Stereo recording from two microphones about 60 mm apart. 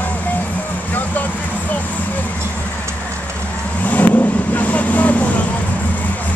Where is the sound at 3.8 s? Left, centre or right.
Left.